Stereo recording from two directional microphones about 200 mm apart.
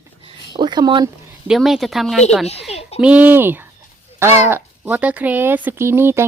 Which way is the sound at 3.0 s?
5° right (ahead or behind).